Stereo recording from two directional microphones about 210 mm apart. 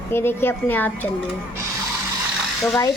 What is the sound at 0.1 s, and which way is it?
Speech, 10° left (ahead or behind).